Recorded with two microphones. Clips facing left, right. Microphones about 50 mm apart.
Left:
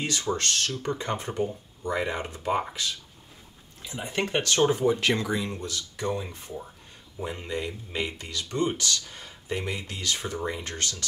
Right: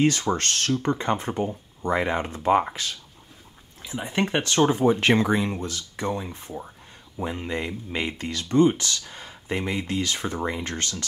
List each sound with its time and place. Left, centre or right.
0.0 s speech: right
3.8 s speech: centre
4.8 s speech: right
7.4 s speech: right